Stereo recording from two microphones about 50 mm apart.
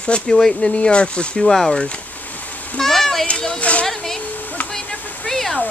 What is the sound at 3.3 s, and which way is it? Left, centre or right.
Speech, left.